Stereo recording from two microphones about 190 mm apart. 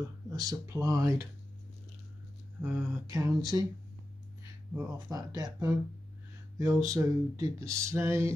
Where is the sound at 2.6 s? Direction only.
20° right (ahead or behind).